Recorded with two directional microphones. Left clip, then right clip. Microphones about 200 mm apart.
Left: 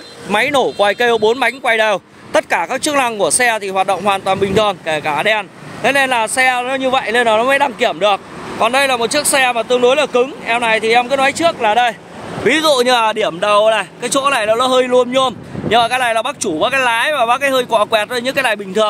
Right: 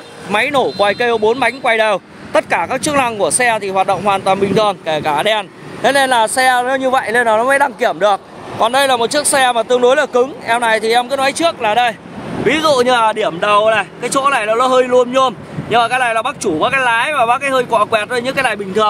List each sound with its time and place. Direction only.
0.3 s speech: 25° left (ahead or behind)
4.8 s speech: 5° right (ahead or behind)
11.1 s speech: centre (ahead or behind)
12.4 s speech: 30° left (ahead or behind)